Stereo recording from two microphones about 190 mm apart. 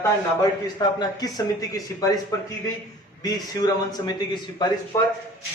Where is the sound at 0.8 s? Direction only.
20° left (ahead or behind).